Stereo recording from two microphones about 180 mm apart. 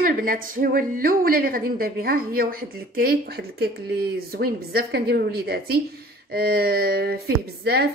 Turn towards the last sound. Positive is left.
turn(degrees=-60)  # may be behind; listen again after turning